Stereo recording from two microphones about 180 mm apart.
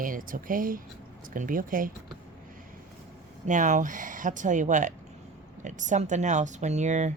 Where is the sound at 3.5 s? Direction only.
45° right (ahead or behind).